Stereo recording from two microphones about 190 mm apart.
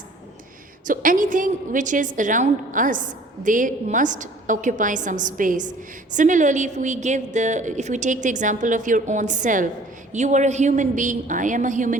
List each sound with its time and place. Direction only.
0.9 s a woman's voice: 45° right (ahead or behind)